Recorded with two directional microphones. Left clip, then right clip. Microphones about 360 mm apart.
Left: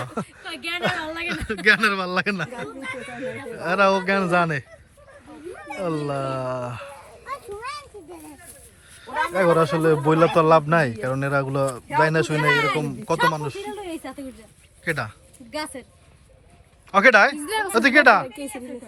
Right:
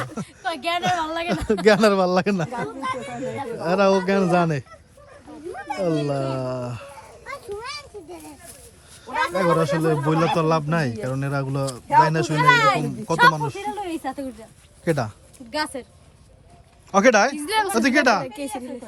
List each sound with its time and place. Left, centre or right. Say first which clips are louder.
0.5 s a woman's voice: right 2 dB; right
1.5 s speech: right 2 dB; centre
5.6 s speech: right 3 dB; centre
7.3 s children playing: even; centre
9.0 s speech: left 1 dB; centre
14.8 s speech: right 2 dB; centre
15.5 s speech: right 4 dB; centre
16.9 s speech: left 2 dB; centre
17.3 s a woman's voice: right 3 dB; centre
17.7 s speech: left 6 dB; centre